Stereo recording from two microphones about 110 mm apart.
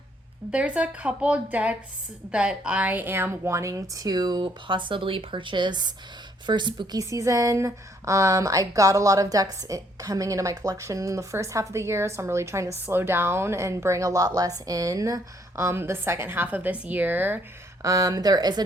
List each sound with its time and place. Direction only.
0.5 s a woman's voice: 10° right (ahead or behind); by 7.0 s 45° right (ahead or behind)
7.0 s a woman's voice: 30° right (ahead or behind)
17.8 s a woman's voice: 35° right (ahead or behind)